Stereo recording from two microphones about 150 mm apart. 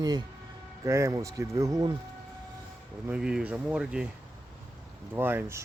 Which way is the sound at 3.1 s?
5° right (ahead or behind).